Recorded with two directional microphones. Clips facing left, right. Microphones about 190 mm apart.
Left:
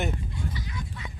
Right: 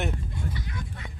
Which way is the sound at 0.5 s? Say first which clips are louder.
Even; 55° right (ahead or behind).